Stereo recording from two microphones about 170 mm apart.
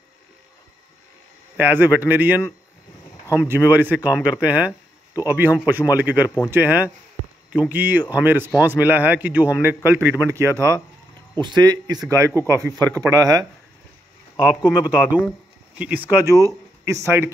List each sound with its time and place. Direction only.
1.6 s speech: 10° right (ahead or behind)
14.4 s speech: 5° right (ahead or behind)